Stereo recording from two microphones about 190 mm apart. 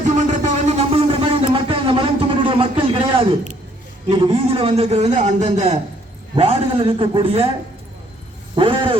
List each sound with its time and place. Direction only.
0.0 s a sound: 40° right (ahead or behind)
4.1 s a man's voice: 30° right (ahead or behind)
8.5 s a man's voice: 25° right (ahead or behind)